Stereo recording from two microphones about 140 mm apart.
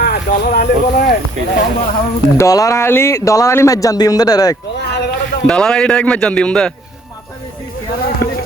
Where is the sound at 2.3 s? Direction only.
25° left (ahead or behind).